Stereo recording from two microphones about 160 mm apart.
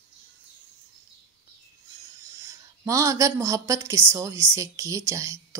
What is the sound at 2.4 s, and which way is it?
Speech, 20° right (ahead or behind).